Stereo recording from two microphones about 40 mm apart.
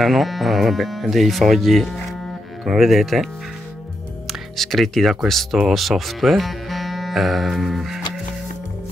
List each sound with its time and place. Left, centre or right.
0.0 s speech: centre
4.3 s speech: centre